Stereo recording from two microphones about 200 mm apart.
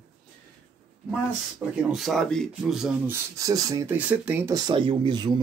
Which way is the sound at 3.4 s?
15° right (ahead or behind).